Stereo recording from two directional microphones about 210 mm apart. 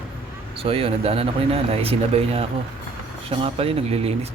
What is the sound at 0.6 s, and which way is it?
Speech, 25° right (ahead or behind).